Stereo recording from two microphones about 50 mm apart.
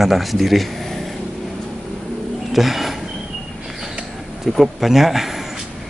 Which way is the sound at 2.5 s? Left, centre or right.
Centre.